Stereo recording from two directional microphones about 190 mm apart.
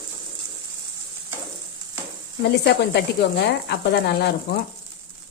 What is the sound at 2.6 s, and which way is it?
Speech, 60° left (ahead or behind).